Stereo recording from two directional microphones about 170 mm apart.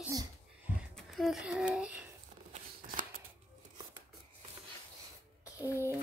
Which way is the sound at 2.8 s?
55° right (ahead or behind).